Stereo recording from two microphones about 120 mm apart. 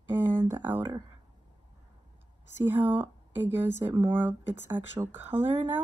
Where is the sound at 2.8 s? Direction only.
15° right (ahead or behind).